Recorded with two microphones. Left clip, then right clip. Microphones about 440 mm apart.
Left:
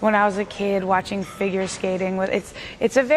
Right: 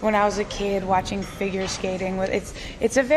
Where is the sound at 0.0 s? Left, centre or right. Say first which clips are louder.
Left 2 dB; left.